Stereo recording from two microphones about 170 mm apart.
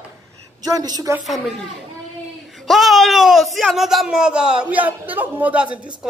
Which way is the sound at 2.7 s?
Centre (ahead or behind).